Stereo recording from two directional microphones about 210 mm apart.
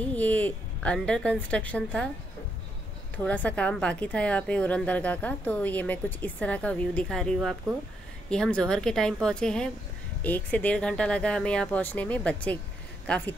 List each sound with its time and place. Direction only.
0.0 s speech: 5° left (ahead or behind)
3.3 s a woman's voice: 5° left (ahead or behind)